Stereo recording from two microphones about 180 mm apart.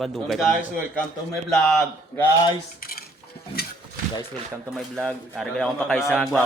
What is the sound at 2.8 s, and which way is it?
Cutlery, 55° left (ahead or behind).